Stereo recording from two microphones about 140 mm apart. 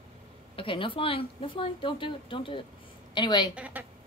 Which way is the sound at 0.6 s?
40° left (ahead or behind).